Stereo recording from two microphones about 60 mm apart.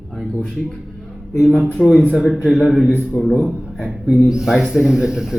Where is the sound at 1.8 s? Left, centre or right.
Centre.